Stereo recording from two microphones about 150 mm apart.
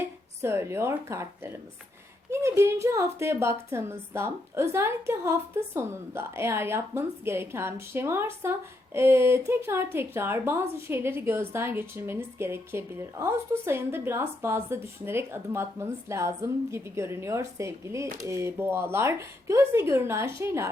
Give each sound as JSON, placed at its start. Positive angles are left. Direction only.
{"t": 0.4, "sound": "a woman's voice", "side_deg": -15}